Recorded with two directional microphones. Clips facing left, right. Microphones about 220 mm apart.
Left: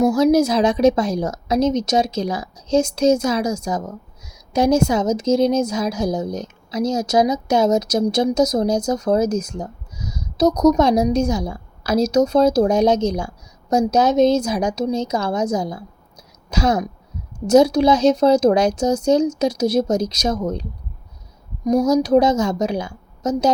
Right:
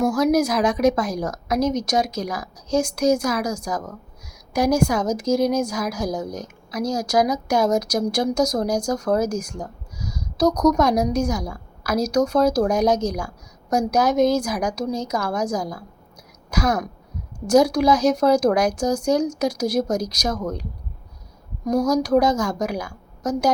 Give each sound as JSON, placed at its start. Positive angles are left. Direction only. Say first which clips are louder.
{"t": 0.0, "sound": "a woman's voice", "louder": "left 4 dB", "side_deg": 25}